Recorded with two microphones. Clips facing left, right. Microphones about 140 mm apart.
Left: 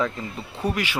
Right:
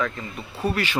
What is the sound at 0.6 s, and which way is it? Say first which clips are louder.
Speech: right 1 dB; 15° left (ahead or behind).